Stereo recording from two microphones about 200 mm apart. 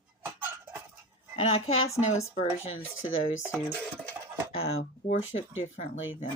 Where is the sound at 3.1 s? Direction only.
80° left.